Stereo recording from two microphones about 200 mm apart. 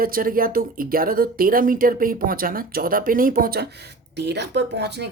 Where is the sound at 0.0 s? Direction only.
45° right (ahead or behind).